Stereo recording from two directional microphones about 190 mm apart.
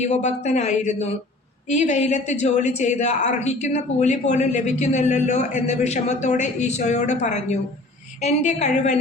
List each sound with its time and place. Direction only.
0.0 s a woman's voice: 40° left (ahead or behind)